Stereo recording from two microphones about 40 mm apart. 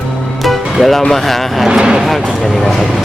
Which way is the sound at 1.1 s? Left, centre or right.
Centre.